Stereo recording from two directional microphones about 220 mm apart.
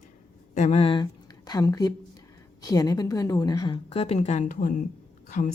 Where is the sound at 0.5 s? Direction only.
30° left (ahead or behind).